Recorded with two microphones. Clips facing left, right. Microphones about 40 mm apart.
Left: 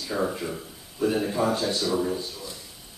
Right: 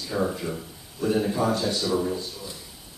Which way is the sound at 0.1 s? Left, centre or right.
Centre.